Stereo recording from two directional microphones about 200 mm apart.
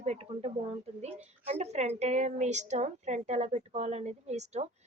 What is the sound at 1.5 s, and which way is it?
Speech, 35° right (ahead or behind).